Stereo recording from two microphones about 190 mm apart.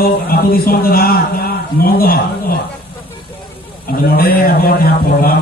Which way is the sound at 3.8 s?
50° left (ahead or behind).